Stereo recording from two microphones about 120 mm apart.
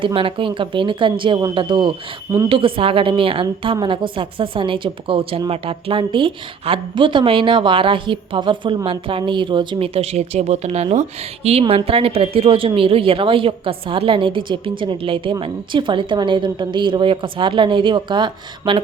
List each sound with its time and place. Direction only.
0.0 s a woman's voice: 45° right (ahead or behind); by 10.8 s 65° right (ahead or behind)
11.7 s a woman's voice: 50° right (ahead or behind)